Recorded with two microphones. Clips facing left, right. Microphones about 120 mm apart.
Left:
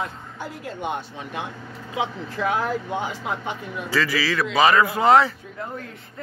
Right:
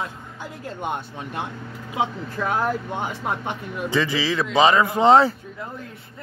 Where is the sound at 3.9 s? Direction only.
20° right (ahead or behind).